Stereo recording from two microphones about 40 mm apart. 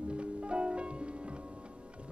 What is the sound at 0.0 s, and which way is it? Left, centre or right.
Music, right.